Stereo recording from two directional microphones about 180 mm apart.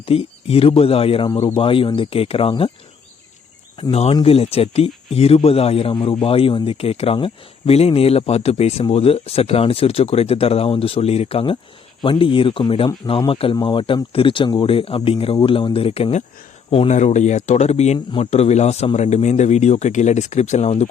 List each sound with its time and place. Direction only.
0.0 s speech: 30° left (ahead or behind)
3.8 s speech: 35° left (ahead or behind)